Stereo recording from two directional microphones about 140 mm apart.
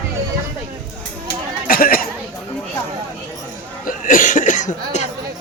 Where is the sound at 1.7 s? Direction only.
90° left.